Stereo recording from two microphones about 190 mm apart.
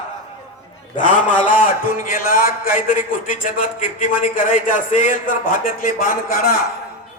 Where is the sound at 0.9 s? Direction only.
45° left (ahead or behind).